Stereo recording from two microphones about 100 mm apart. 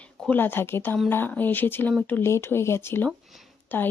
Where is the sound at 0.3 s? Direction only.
20° left (ahead or behind).